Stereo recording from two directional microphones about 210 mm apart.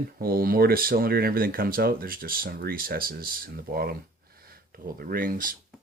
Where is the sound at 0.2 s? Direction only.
45° right (ahead or behind).